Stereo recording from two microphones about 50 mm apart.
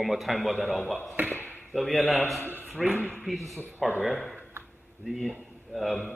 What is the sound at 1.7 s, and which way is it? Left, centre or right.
A man's voice, centre.